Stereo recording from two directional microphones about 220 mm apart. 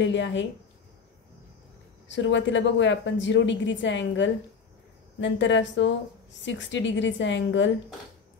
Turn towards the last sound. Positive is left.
turn(degrees=55)  # may be behind; listen again after turning